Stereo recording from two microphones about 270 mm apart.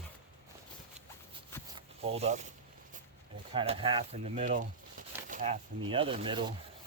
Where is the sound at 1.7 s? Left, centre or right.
Right.